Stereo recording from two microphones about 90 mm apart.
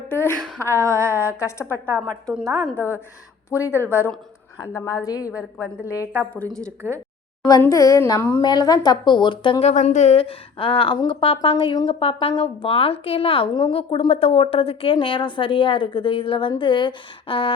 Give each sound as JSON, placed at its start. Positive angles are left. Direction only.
{"t": 0.1, "sound": "a sound", "side_deg": 25}
{"t": 0.6, "sound": "a woman's voice", "side_deg": 30}
{"t": 2.0, "sound": "a woman's voice", "side_deg": 10}
{"t": 2.7, "sound": "speech", "side_deg": 30}
{"t": 4.9, "sound": "a woman's voice", "side_deg": 40}
{"t": 6.5, "sound": "a woman's voice", "side_deg": 10}
{"t": 7.7, "sound": "a woman's voice", "side_deg": 40}
{"t": 8.4, "sound": "a woman's voice", "side_deg": 50}
{"t": 10.2, "sound": "speech", "side_deg": 90}
{"t": 11.4, "sound": "a woman's voice", "side_deg": 70}
{"t": 11.9, "sound": "speech", "side_deg": 90}
{"t": 13.5, "sound": "a woman's voice", "side_deg": 70}